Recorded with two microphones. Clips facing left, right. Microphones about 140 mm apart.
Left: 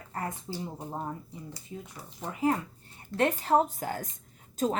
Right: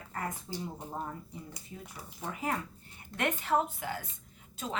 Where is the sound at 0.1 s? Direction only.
30° left (ahead or behind).